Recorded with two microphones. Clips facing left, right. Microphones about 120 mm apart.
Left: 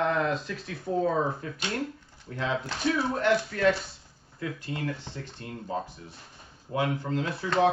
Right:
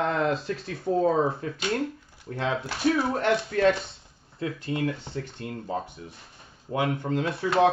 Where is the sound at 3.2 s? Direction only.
30° right (ahead or behind).